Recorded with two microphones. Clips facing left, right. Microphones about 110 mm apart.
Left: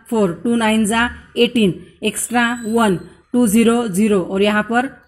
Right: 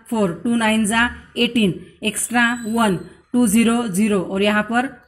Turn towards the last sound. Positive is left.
turn(degrees=25)  # may be behind; listen again after turning